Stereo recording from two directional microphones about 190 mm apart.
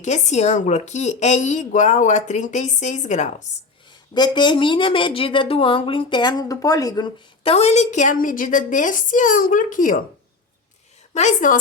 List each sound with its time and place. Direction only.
0.0 s a woman's voice: 35° left (ahead or behind)
4.1 s a woman's voice: 25° left (ahead or behind); by 10.0 s 45° left (ahead or behind)
11.1 s a woman's voice: 40° left (ahead or behind)